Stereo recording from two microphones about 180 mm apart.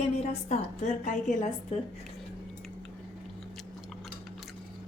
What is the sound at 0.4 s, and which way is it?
A woman's voice, 40° left (ahead or behind).